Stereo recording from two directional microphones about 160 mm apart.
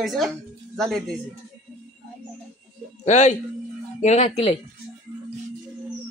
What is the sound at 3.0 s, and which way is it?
Speech, 45° left (ahead or behind).